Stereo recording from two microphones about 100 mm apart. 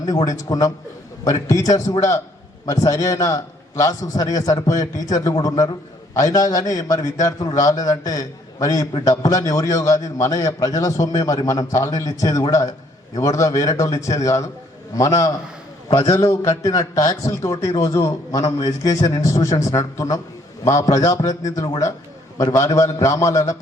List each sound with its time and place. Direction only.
0.0 s a man's voice: 35° left (ahead or behind)